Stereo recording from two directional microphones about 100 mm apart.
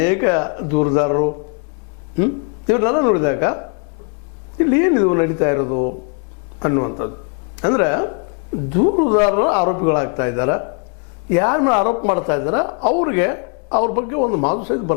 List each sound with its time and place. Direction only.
0.0 s speech: 15° left (ahead or behind)